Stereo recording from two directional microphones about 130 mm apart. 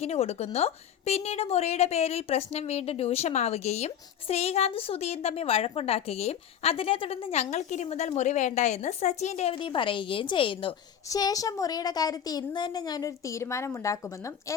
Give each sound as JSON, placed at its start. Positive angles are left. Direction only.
{"t": 0.0, "sound": "a woman's voice", "side_deg": 55}
{"t": 9.6, "sound": "a woman's voice", "side_deg": 40}
{"t": 11.1, "sound": "speech", "side_deg": 25}